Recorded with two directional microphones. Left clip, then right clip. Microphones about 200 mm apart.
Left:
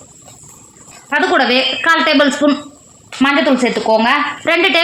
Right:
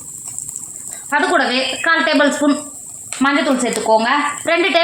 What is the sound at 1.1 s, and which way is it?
Speech, 50° left (ahead or behind).